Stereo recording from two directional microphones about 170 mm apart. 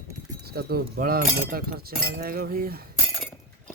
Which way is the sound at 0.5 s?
65° right (ahead or behind).